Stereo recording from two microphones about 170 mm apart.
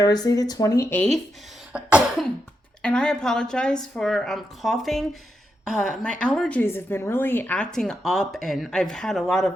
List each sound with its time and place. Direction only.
0.0 s speech: 20° left (ahead or behind)
1.7 s cough: 5° right (ahead or behind)
2.8 s a woman's voice: 5° left (ahead or behind)